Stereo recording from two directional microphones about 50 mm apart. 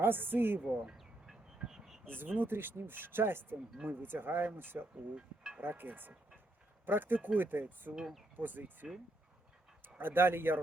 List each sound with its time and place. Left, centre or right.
0.0 s speech: right
1.5 s vehicle: centre
2.0 s speech: right
7.9 s speech: centre
8.4 s speech: right
10.0 s speech: right